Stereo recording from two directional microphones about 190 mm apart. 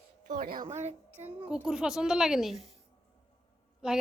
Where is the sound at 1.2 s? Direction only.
10° right (ahead or behind).